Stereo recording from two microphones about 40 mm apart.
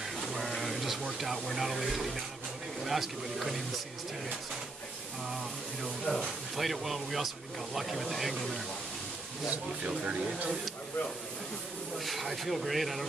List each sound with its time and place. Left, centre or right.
0.0 s a sound: centre
1.2 s speech: centre
6.1 s speech: left
6.5 s speech: centre
9.5 s speech: right
12.0 s speech: centre